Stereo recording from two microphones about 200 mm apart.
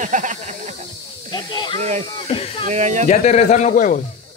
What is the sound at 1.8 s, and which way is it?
Speech, 35° right (ahead or behind).